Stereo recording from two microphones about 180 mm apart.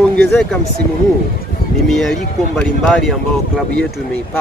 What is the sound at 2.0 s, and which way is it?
Speech, centre (ahead or behind).